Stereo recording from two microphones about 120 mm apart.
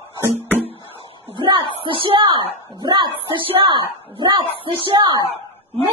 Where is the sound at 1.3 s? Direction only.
40° right (ahead or behind).